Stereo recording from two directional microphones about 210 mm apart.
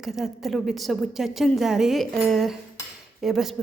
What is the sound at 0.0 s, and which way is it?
A woman's voice, centre (ahead or behind).